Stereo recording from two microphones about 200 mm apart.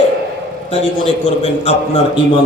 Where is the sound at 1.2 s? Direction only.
35° left (ahead or behind).